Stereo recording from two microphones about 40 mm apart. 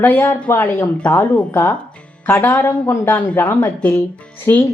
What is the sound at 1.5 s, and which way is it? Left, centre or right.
Speech, left.